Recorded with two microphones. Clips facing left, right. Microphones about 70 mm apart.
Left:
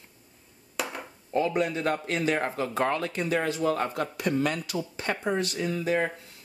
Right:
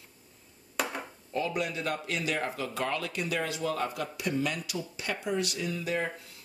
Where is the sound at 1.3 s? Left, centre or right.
Left.